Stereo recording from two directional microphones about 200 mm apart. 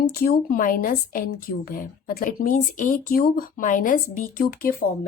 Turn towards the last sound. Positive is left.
turn(degrees=45)  # may be behind; listen again after turning